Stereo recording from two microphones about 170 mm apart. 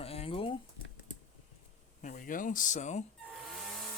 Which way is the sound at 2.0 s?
50° left (ahead or behind).